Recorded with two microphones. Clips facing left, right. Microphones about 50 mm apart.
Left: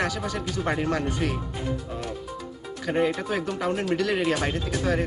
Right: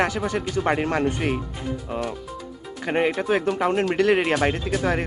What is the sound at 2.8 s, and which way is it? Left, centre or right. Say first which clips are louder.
Speech: right 3 dB; right.